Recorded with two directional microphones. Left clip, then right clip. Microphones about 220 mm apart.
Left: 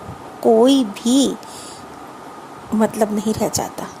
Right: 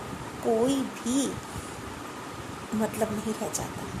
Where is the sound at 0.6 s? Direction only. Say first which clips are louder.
Left 12 dB; 35° left (ahead or behind).